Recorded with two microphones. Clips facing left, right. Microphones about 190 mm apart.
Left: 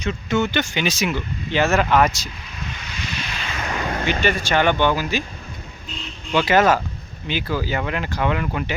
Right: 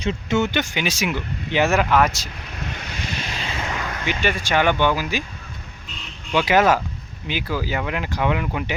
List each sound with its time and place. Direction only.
0.0 s speech: 25° right (ahead or behind)
1.9 s speech: centre (ahead or behind)
2.6 s vehicle: 60° right (ahead or behind); by 3.8 s 25° right (ahead or behind)
4.2 s speech: 10° right (ahead or behind)
6.3 s speech: 10° right (ahead or behind)